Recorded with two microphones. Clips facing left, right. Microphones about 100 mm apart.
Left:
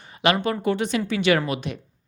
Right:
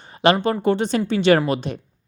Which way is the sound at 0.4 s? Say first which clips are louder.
Right 4 dB; 30° right (ahead or behind).